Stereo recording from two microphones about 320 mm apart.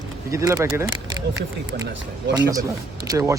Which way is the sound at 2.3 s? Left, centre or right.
Centre.